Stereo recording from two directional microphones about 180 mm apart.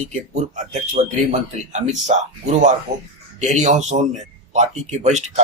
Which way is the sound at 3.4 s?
40° right (ahead or behind).